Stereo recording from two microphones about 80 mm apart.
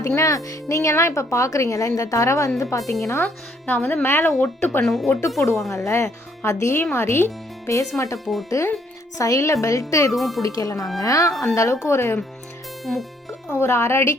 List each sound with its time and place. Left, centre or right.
0.2 s a woman's voice: left
3.7 s a woman's voice: left
4.8 s speech: centre
5.0 s a woman's voice: left
7.9 s a woman's voice: left
8.2 s speech: centre
8.4 s a woman's voice: left
10.1 s speech: centre
10.4 s a woman's voice: left
12.8 s music: centre
13.5 s a woman's voice: left